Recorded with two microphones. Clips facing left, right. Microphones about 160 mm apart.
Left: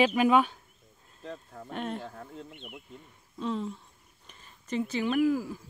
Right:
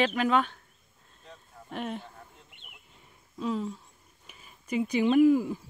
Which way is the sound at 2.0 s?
80° left.